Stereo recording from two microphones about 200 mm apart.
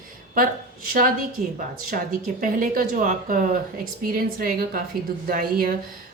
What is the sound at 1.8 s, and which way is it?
A woman's voice, 45° right (ahead or behind).